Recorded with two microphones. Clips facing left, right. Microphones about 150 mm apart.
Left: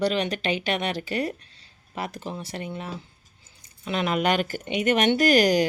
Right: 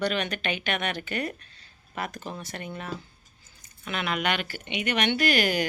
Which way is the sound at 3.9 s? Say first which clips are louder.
Left 5 dB; 35° left (ahead or behind).